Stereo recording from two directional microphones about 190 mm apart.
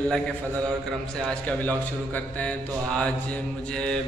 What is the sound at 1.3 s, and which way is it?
Speech, 5° left (ahead or behind).